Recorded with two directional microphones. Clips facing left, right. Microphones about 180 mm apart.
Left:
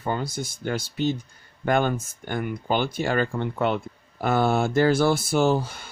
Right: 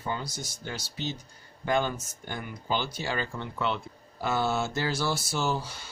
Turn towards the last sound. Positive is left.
turn(degrees=55)  # may be behind; listen again after turning